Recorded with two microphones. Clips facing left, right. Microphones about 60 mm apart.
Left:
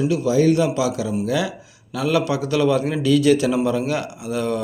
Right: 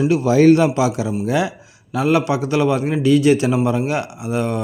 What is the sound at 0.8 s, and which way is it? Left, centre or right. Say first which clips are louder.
A man's voice: right 2 dB; right.